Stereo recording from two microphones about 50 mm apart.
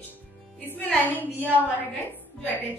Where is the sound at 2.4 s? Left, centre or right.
Left.